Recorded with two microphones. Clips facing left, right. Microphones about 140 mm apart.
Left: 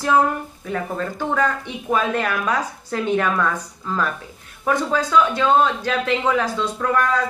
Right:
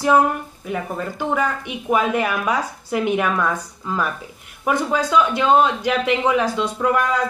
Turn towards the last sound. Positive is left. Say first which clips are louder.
# right 1 dB
turn(degrees=-15)  # may be behind; listen again after turning